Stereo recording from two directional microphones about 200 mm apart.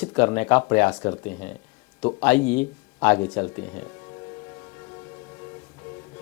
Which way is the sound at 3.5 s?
15° left (ahead or behind).